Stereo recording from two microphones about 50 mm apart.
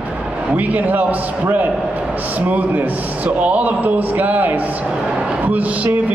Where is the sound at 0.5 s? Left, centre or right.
Right.